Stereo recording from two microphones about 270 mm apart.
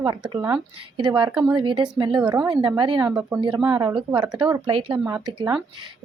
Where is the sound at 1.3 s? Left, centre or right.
Centre.